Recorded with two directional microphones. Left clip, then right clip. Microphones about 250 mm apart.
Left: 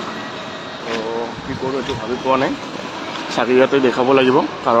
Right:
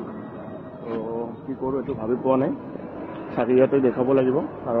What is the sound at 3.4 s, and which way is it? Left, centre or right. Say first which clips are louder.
Speech: left 5 dB; centre.